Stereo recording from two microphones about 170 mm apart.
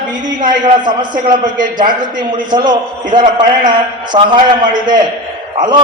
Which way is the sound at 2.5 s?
25° right (ahead or behind).